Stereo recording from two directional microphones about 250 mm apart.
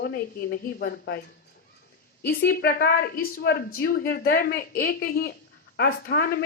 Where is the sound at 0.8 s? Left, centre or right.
Left.